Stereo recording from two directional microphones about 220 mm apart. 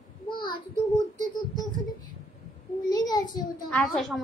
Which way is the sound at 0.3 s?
20° left (ahead or behind).